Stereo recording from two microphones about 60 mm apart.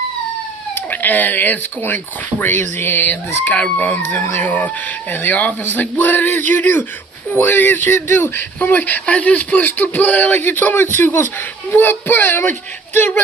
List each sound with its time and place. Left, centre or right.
0.9 s speech: left
3.5 s speech: left